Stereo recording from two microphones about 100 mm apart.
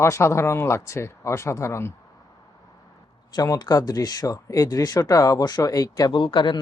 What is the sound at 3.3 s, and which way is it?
Speech, 40° left (ahead or behind).